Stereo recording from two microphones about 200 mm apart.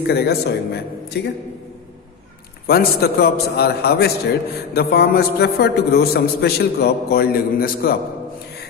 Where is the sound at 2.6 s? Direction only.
50° left (ahead or behind).